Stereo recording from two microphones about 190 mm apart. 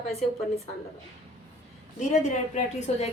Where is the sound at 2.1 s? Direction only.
35° left (ahead or behind).